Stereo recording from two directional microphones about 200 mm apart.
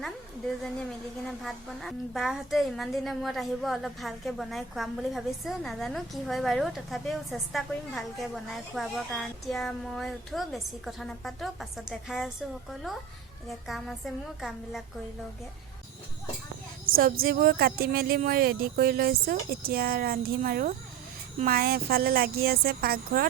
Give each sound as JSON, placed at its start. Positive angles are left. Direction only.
{"t": 1.3, "sound": "a woman's voice", "side_deg": 0}
{"t": 13.7, "sound": "a woman's voice", "side_deg": 0}
{"t": 16.8, "sound": "speech", "side_deg": -45}